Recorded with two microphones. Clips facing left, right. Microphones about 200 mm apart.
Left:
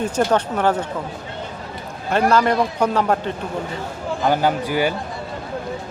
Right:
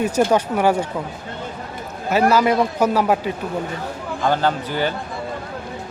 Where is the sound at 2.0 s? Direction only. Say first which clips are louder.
Right 1 dB; 5° right (ahead or behind).